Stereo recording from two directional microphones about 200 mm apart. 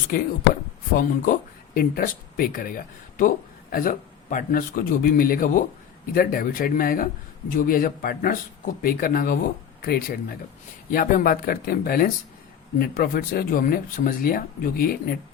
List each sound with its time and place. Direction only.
0.1 s speech: 50° left (ahead or behind)